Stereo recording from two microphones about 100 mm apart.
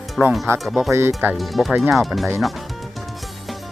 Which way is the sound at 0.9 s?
25° right (ahead or behind).